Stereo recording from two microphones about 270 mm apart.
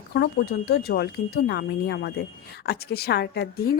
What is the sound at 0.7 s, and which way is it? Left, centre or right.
A woman's voice, left.